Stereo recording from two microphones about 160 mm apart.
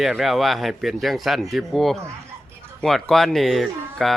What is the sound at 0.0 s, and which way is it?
Speech, centre (ahead or behind).